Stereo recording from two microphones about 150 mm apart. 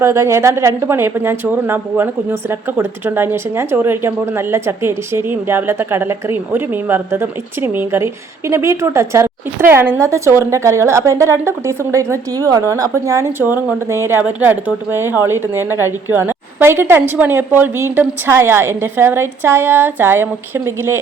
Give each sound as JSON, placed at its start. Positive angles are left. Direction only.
{"t": 0.0, "sound": "speech", "side_deg": -20}